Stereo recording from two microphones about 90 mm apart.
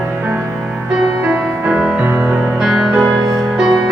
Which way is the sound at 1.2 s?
10° right (ahead or behind).